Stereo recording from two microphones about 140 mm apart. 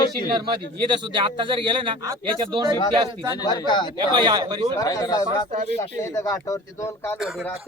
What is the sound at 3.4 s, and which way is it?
Speech, 30° left (ahead or behind).